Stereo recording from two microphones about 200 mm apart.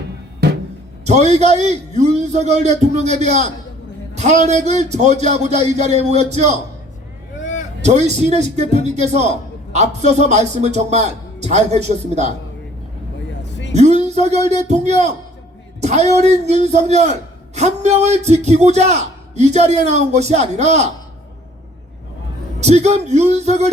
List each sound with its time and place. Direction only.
1.0 s speech: 35° right (ahead or behind)
7.8 s speech: 35° right (ahead or behind)
13.4 s vehicle: 65° left (ahead or behind)
13.7 s speech: 35° right (ahead or behind)
22.6 s speech: 35° right (ahead or behind)